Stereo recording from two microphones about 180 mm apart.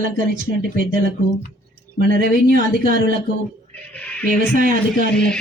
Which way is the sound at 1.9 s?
55° right (ahead or behind).